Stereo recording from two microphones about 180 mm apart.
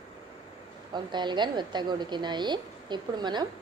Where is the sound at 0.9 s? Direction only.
25° right (ahead or behind).